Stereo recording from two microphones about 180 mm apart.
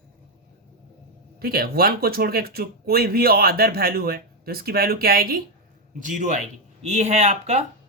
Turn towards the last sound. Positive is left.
turn(degrees=-35)  # may be behind; listen again after turning